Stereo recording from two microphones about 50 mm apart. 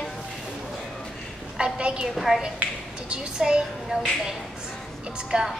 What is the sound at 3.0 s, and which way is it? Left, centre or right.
A woman's voice, centre.